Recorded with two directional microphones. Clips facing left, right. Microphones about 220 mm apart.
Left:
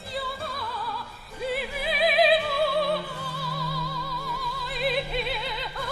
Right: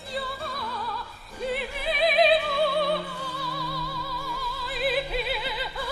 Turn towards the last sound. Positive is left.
turn(degrees=-5)  # may be behind; listen again after turning